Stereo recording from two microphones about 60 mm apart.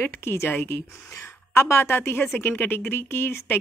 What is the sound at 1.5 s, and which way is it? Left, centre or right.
Speech, left.